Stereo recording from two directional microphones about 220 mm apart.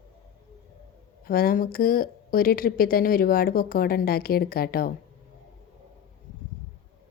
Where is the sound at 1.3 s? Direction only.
40° left (ahead or behind).